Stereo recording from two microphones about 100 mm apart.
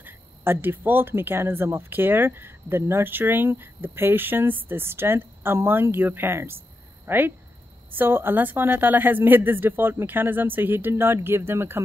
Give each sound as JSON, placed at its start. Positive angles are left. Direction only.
{"t": 0.0, "sound": "speech", "side_deg": -20}